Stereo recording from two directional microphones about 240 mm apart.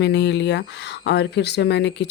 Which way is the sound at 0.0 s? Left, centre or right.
Left.